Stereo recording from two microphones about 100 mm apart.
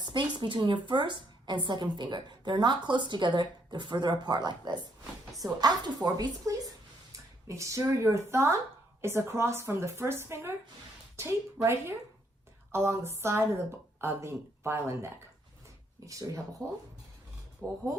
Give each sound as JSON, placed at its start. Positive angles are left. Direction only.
{"t": 0.0, "sound": "a woman's voice", "side_deg": -50}
{"t": 16.6, "sound": "speech", "side_deg": 10}
{"t": 17.6, "sound": "a woman's voice", "side_deg": -20}